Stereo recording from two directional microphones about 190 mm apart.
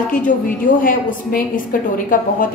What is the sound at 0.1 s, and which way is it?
A woman's voice, 45° left (ahead or behind).